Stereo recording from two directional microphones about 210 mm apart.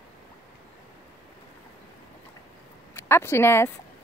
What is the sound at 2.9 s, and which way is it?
Speech, 10° left (ahead or behind).